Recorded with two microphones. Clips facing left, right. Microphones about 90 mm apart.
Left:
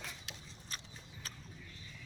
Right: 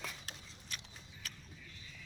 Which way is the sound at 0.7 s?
35° left (ahead or behind).